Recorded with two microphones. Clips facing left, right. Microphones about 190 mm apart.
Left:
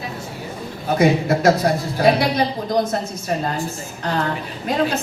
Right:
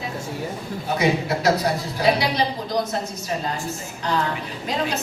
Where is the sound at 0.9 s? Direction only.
50° left (ahead or behind).